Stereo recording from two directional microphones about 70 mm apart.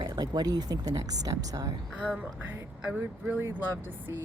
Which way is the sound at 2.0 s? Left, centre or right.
Centre.